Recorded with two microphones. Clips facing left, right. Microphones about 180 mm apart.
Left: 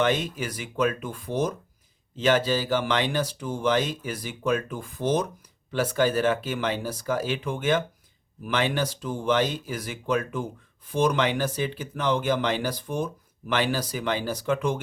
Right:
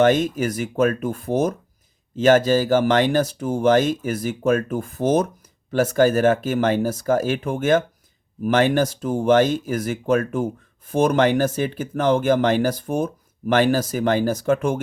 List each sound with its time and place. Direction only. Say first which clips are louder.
0.0 s speech: right 8 dB; 45° right (ahead or behind)